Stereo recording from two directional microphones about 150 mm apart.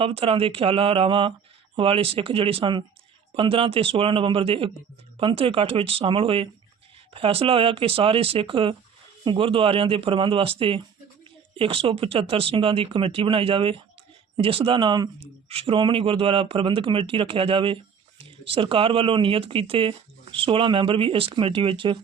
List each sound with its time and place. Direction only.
0.0 s speech: 40° right (ahead or behind)